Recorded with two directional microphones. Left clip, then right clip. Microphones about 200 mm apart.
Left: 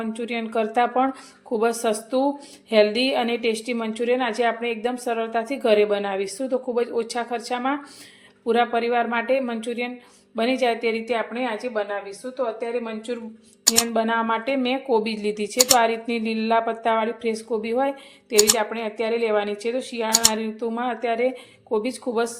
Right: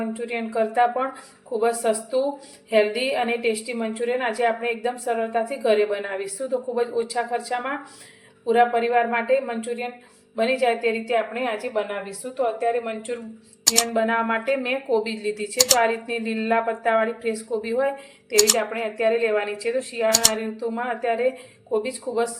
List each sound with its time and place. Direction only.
0.3 s a woman's voice: 45° left (ahead or behind)
13.7 s speech: centre (ahead or behind)
13.9 s a woman's voice: 35° left (ahead or behind)
15.4 s speech: centre (ahead or behind)
15.9 s a woman's voice: 35° left (ahead or behind)
18.3 s speech: centre (ahead or behind)
18.7 s a woman's voice: 35° left (ahead or behind)
20.1 s speech: centre (ahead or behind)
20.4 s a woman's voice: 40° left (ahead or behind)